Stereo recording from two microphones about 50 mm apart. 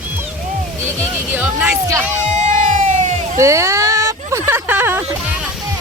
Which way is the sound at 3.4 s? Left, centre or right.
Right.